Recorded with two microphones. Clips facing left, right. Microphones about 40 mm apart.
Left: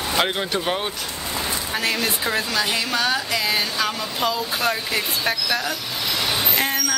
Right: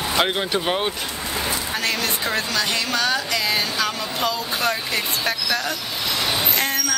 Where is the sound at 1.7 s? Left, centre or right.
Centre.